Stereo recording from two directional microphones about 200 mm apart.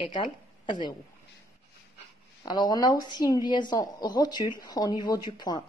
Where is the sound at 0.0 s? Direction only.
25° left (ahead or behind).